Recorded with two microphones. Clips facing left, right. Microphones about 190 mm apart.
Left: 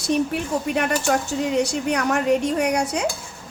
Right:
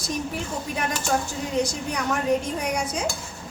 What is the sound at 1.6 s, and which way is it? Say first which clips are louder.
A woman's voice: left 5 dB; 70° left (ahead or behind).